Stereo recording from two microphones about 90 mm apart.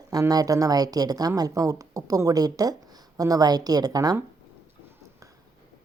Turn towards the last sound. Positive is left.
turn(degrees=-45)  # may be behind; listen again after turning